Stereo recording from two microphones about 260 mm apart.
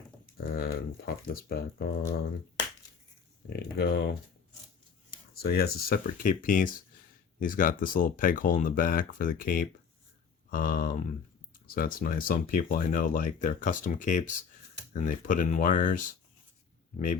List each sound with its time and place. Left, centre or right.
0.3 s speech: left
3.5 s speech: left
5.4 s speech: left